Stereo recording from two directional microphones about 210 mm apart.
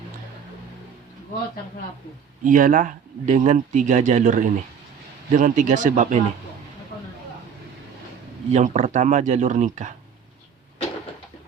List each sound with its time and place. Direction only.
2.4 s speech: 40° right (ahead or behind)
8.4 s speech: 35° right (ahead or behind)